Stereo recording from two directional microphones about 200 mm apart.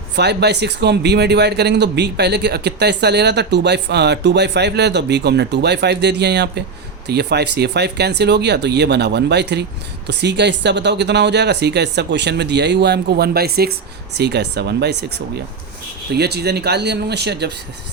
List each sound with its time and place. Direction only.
0.2 s speech: 55° right (ahead or behind)
16.1 s speech: 55° right (ahead or behind)